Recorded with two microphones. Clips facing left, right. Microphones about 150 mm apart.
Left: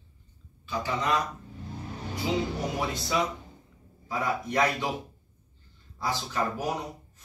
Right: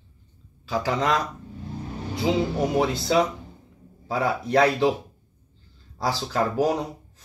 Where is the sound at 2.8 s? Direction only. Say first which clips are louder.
Right 6 dB; 85° right.